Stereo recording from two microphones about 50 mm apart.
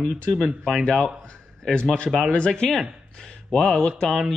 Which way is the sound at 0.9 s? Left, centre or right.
Centre.